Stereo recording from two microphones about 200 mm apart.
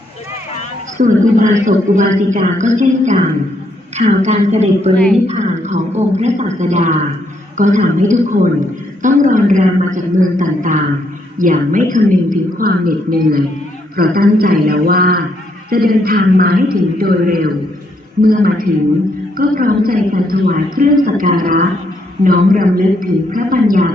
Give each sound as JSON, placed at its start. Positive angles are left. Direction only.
{"t": 0.9, "sound": "a woman's voice", "side_deg": -40}